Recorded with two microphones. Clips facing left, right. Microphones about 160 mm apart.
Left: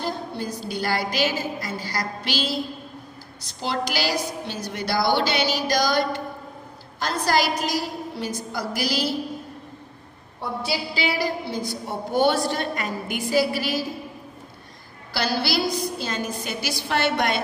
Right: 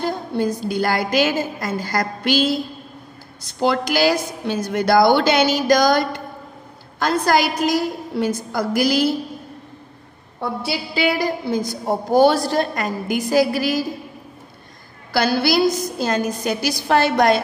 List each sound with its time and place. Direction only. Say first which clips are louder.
0.0 s a woman's voice: right 7 dB; 50° right (ahead or behind)
3.5 s a woman's voice: right 8 dB; 55° right (ahead or behind)
7.1 s a woman's voice: right 4 dB; 55° right (ahead or behind)
10.7 s a woman's voice: right 5 dB; 55° right (ahead or behind)
15.1 s a woman's voice: right 7 dB; 50° right (ahead or behind)